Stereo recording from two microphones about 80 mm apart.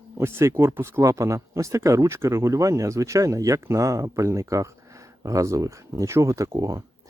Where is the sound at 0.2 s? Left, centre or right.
Right.